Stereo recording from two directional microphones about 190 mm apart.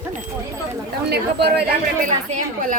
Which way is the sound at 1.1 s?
55° right (ahead or behind).